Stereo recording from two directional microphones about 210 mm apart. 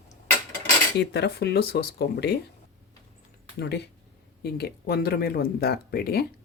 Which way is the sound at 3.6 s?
50° left (ahead or behind).